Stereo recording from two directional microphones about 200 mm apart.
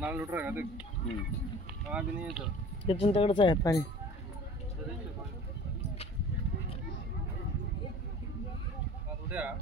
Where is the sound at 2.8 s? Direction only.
25° left (ahead or behind).